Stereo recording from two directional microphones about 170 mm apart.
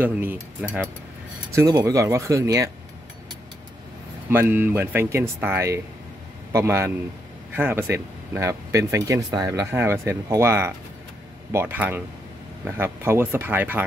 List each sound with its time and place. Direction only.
0.0 s speech: 10° right (ahead or behind)
1.5 s speech: 20° right (ahead or behind)
4.3 s speech: 10° right (ahead or behind)